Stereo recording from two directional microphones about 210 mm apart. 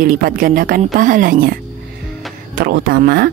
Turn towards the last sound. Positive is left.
turn(degrees=-50)  # may be behind; listen again after turning